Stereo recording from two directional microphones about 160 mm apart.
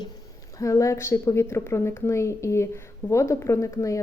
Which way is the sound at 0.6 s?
20° left (ahead or behind).